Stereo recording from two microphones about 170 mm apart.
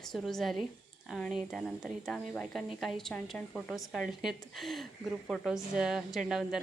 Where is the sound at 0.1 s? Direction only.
Centre (ahead or behind).